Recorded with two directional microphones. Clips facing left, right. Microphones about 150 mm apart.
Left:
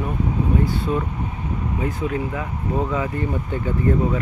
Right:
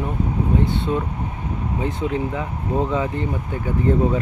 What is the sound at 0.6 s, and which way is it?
Speech, 25° right (ahead or behind).